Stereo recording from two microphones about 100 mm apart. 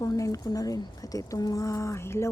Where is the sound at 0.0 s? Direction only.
35° left (ahead or behind).